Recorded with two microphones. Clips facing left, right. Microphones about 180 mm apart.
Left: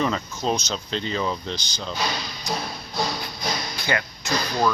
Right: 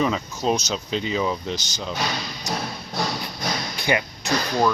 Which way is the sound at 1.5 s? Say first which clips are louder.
Right 2 dB; 40° right (ahead or behind).